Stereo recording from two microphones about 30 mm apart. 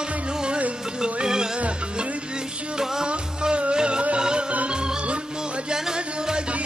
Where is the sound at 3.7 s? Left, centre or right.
Right.